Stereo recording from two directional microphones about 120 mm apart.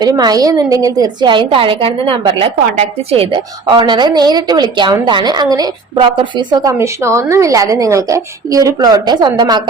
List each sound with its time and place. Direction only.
0.0 s a woman's voice: 35° right (ahead or behind); by 3.2 s 55° right (ahead or behind)
3.7 s a woman's voice: 35° right (ahead or behind)
6.7 s a woman's voice: 25° right (ahead or behind)